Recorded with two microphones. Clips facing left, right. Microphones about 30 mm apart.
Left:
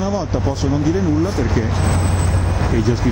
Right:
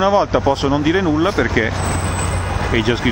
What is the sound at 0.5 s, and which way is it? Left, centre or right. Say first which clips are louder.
Speech: right 3 dB; right.